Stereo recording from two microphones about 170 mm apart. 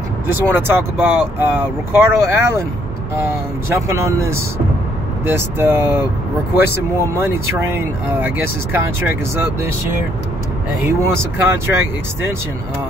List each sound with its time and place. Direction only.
0.3 s speech: 15° right (ahead or behind)
11.1 s speech: 15° right (ahead or behind)